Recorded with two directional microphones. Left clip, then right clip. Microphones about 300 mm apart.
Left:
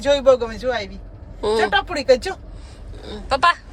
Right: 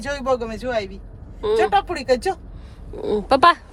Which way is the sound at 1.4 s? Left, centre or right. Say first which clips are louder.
Even; centre.